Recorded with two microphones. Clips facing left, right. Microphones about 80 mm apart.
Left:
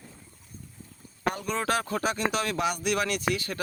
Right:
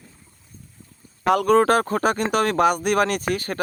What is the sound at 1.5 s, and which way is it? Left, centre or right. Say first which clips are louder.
Speech: right 12 dB; right.